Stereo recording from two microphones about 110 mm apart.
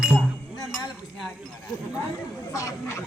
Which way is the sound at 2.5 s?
30° left (ahead or behind).